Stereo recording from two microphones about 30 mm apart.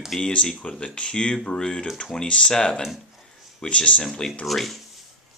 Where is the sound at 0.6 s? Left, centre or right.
Left.